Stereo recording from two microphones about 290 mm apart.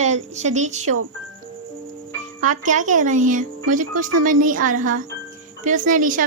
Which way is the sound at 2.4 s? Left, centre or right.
Right.